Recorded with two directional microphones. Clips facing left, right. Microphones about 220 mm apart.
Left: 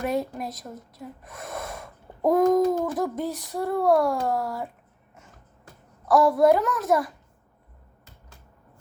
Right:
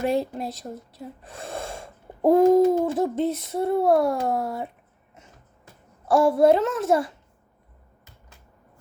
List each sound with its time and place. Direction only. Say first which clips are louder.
0.0 s speech: right 3 dB; 25° right (ahead or behind)
6.1 s speech: right 1 dB; 25° right (ahead or behind)